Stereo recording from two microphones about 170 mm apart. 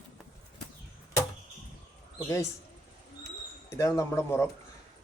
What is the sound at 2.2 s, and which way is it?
Speech, 15° left (ahead or behind).